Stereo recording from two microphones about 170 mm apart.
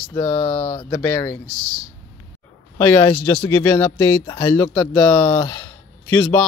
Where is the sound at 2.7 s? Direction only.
15° left (ahead or behind).